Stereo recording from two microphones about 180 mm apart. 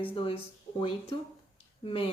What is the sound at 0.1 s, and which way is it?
Speech, 30° left (ahead or behind).